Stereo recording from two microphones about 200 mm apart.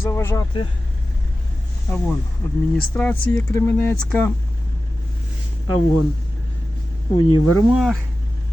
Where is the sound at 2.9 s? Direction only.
5° left (ahead or behind).